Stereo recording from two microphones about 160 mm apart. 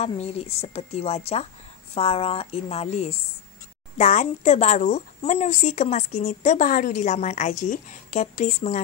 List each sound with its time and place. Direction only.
0.1 s speech: 40° left (ahead or behind)